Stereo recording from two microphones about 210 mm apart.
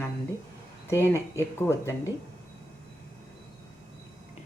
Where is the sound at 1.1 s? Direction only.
15° left (ahead or behind).